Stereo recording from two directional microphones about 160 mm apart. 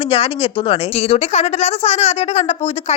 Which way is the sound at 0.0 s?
35° left (ahead or behind).